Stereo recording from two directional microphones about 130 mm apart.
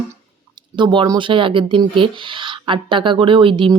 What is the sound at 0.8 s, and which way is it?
A woman's voice, 35° right (ahead or behind).